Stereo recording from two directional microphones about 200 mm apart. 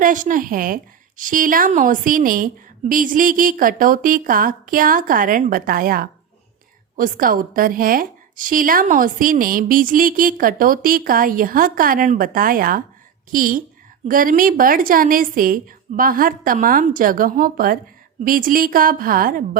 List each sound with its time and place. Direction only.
0.0 s a woman's voice: 40° right (ahead or behind)